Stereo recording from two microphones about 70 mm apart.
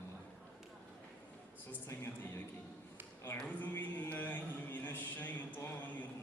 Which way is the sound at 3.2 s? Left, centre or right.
Left.